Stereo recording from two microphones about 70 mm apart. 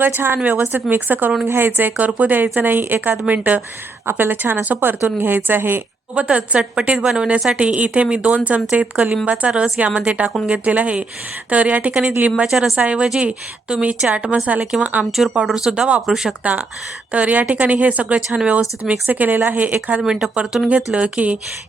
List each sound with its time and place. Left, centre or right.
0.0 s a woman's voice: right
6.1 s a woman's voice: centre
14.6 s a woman's voice: centre
15.7 s a woman's voice: centre
16.4 s a woman's voice: right
20.0 s a woman's voice: centre